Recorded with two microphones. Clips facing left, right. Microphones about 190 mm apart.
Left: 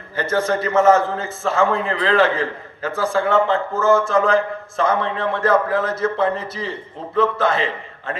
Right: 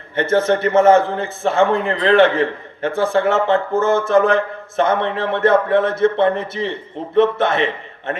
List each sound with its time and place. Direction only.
0.2 s a man's voice: 25° right (ahead or behind)